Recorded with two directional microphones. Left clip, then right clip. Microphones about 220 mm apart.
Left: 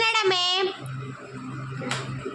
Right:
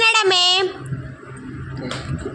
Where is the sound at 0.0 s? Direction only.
25° right (ahead or behind).